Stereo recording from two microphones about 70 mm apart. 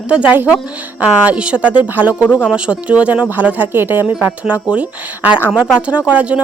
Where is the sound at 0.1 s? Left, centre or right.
Centre.